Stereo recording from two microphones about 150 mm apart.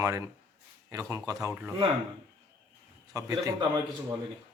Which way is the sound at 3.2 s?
20° right (ahead or behind).